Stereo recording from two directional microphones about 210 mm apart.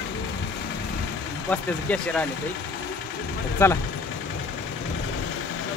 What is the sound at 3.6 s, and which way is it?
Speech, 15° left (ahead or behind).